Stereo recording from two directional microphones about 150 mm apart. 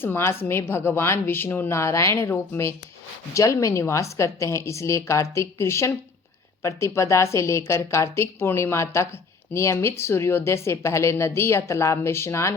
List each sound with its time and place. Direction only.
0.0 s a woman's voice: 15° left (ahead or behind)